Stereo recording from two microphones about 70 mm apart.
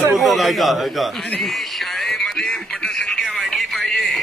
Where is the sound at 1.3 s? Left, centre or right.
Centre.